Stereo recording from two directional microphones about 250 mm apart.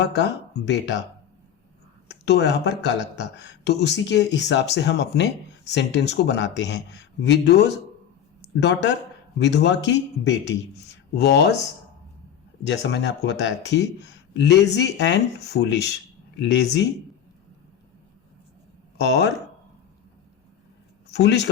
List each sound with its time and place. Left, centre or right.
0.0 s speech: left
2.0 s speech: left
12.6 s speech: left
18.9 s speech: left
21.1 s a man's voice: left